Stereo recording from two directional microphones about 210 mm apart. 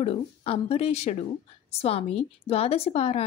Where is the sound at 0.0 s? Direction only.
25° left (ahead or behind).